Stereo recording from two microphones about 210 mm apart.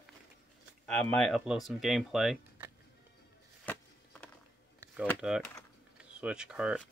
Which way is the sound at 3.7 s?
10° left (ahead or behind).